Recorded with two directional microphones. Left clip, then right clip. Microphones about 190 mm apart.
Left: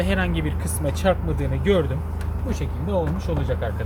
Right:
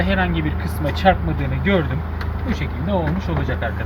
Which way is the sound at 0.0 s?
60° left (ahead or behind).